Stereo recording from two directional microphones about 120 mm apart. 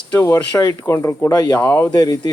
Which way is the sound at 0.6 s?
25° left (ahead or behind).